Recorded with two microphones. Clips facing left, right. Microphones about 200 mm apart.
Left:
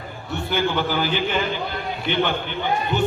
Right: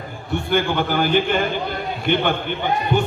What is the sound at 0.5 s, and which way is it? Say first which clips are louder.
A man's voice: right 2 dB; 50° right (ahead or behind).